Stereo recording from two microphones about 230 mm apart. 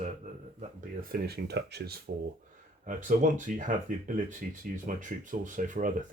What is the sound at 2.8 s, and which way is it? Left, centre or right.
Speech, right.